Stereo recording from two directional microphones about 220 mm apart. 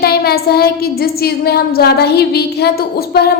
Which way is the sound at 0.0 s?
45° left (ahead or behind).